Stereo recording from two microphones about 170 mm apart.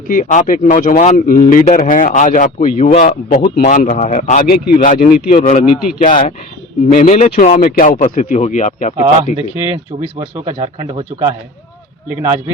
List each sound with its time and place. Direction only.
0.1 s a man's voice: 50° left (ahead or behind)
9.9 s speech: 25° right (ahead or behind)
12.0 s speech: 15° right (ahead or behind)